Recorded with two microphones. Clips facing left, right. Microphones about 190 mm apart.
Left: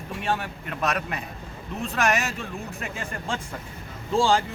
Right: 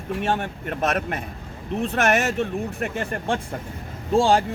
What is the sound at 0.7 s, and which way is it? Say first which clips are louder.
Speech: right 3 dB; 50° right (ahead or behind).